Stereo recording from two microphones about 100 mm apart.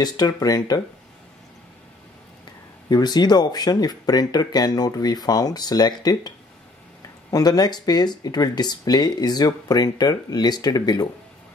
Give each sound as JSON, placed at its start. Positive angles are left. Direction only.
{"t": 0.0, "sound": "speech", "side_deg": 40}
{"t": 2.9, "sound": "speech", "side_deg": 45}